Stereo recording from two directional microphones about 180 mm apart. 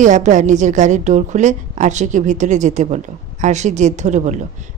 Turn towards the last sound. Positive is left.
turn(degrees=-40)  # may be behind; listen again after turning